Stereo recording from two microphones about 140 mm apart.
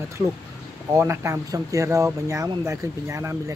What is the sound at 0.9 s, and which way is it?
Speech, 20° right (ahead or behind).